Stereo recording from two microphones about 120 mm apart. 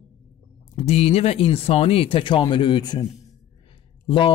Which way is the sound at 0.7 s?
55° left (ahead or behind).